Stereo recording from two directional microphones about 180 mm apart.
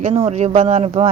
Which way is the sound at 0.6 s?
30° right (ahead or behind).